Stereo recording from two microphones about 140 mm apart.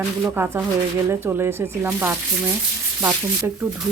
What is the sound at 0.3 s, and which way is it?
Speech, 15° right (ahead or behind).